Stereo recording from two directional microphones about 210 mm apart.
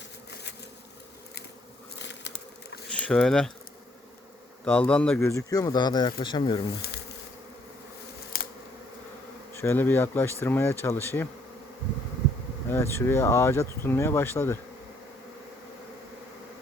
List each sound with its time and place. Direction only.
2.0 s bee: 55° left (ahead or behind)
2.9 s speech: 5° left (ahead or behind)
4.6 s speech: 5° left (ahead or behind); by 6.6 s 20° left (ahead or behind)
8.3 s bee: 45° left (ahead or behind)
9.6 s speech: 10° left (ahead or behind)
12.6 s speech: 10° left (ahead or behind)